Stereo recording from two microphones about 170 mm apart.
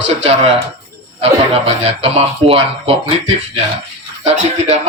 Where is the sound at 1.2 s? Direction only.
40° right (ahead or behind).